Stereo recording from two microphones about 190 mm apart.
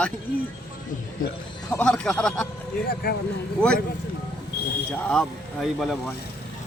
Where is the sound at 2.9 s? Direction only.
55° left (ahead or behind).